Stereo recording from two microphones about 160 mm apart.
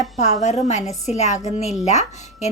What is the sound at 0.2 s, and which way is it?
Speech, 45° left (ahead or behind).